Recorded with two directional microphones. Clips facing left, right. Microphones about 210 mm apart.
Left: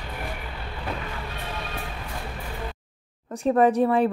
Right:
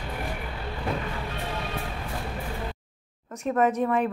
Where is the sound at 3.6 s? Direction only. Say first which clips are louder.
Left 4 dB; 30° left (ahead or behind).